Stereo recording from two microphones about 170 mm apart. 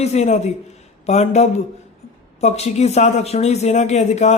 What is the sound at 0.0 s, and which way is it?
A man's voice, 40° left (ahead or behind).